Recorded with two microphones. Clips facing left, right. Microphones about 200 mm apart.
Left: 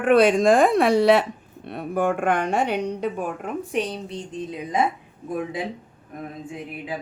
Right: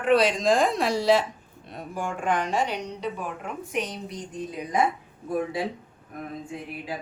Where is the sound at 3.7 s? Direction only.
30° left (ahead or behind).